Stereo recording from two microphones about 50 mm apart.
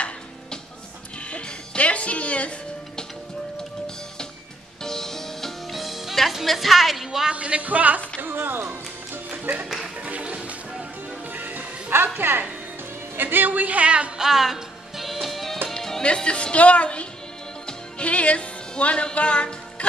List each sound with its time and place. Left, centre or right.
1.3 s music: left
4.8 s music: centre
7.3 s a man's voice: right
8.2 s speech: right
9.4 s speech: right
9.9 s music: right
11.2 s music: right
11.9 s a woman's voice: right
14.1 s music: centre
16.0 s speech: left
17.6 s music: left